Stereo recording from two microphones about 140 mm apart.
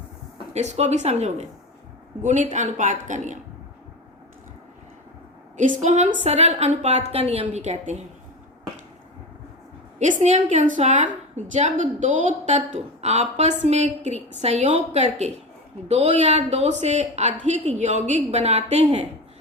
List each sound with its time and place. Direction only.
0.5 s a woman's voice: 50° right (ahead or behind)
5.5 s a woman's voice: 60° right (ahead or behind)
10.0 s a woman's voice: 60° right (ahead or behind)